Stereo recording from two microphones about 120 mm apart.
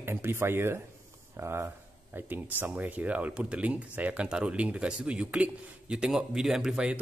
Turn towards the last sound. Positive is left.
turn(degrees=-5)  # may be behind; listen again after turning